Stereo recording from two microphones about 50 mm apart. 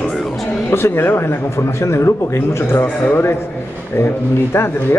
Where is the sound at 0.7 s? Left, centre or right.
Left.